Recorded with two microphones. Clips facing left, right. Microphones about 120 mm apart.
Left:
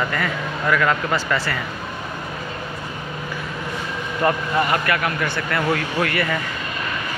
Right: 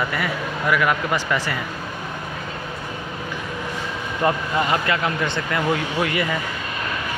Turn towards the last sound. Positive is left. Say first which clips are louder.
# left 1 dB
turn(degrees=-20)  # may be behind; listen again after turning